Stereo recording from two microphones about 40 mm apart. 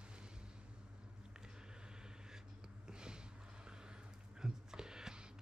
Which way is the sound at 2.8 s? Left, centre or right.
Right.